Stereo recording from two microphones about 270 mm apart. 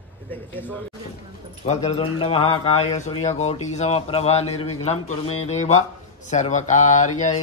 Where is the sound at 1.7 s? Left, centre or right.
Left.